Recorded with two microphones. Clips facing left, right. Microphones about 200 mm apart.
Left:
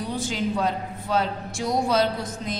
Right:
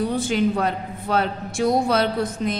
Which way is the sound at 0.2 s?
60° right (ahead or behind).